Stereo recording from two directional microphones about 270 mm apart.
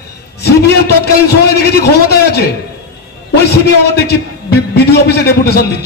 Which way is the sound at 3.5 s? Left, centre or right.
Left.